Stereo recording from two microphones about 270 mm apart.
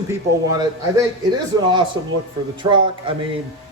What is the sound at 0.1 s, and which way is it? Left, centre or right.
Speech, centre.